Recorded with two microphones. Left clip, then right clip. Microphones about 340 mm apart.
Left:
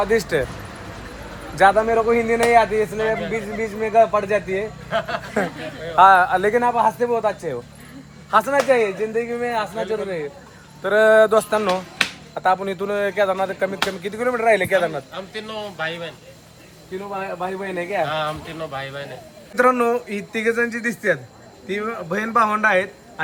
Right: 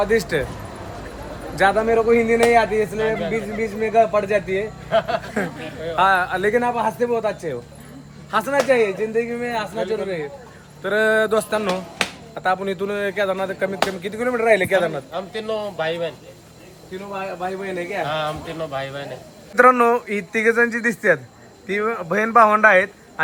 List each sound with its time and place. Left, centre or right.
0.0 s speech: centre
1.5 s speech: centre
4.9 s speech: centre
6.0 s speech: centre
10.8 s speech: centre
15.1 s speech: right
17.4 s speech: centre
18.0 s speech: centre
19.5 s speech: centre